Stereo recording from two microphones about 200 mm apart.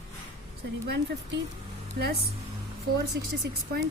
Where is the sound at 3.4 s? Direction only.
60° right (ahead or behind).